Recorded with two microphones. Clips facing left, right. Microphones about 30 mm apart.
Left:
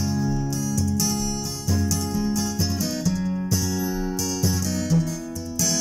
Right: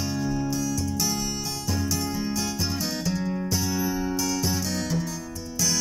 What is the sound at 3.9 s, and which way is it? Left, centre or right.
Music, right.